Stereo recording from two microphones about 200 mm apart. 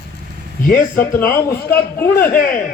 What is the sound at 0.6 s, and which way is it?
A man's voice, 45° left (ahead or behind).